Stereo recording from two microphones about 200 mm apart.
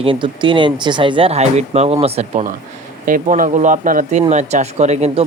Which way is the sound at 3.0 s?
45° right (ahead or behind).